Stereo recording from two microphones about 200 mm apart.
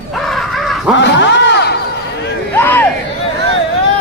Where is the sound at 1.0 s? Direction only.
60° left (ahead or behind).